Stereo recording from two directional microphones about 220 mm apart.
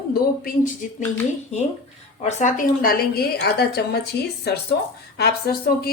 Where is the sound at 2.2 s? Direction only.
35° left (ahead or behind).